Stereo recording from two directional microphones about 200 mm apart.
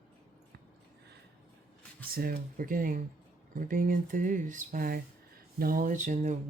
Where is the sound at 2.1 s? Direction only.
45° right (ahead or behind).